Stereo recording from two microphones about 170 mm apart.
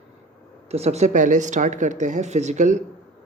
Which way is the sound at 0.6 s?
40° right (ahead or behind).